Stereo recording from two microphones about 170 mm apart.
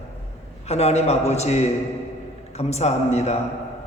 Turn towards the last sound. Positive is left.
turn(degrees=40)  # may be behind; listen again after turning